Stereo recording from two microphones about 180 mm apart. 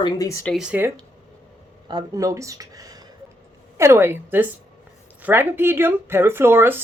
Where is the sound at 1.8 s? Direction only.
20° right (ahead or behind).